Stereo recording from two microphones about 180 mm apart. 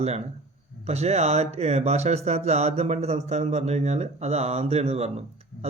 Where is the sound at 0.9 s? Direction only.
35° right (ahead or behind).